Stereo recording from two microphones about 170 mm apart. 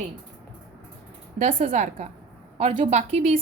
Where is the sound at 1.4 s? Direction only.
55° right (ahead or behind).